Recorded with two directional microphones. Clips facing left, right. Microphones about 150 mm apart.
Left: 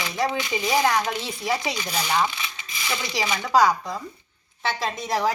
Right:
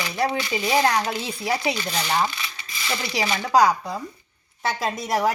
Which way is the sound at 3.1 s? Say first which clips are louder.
Right 1 dB; 10° right (ahead or behind).